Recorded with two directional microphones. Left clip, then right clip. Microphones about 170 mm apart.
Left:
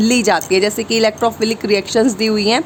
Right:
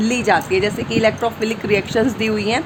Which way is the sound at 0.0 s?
40° left (ahead or behind).